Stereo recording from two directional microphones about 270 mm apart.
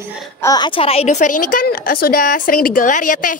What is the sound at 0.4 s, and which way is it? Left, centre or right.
A woman's voice, centre.